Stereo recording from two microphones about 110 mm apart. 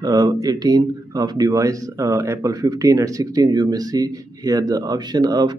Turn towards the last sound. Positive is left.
turn(degrees=-40)  # may be behind; listen again after turning